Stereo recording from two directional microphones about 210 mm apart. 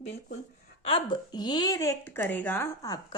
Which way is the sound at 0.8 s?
25° left (ahead or behind).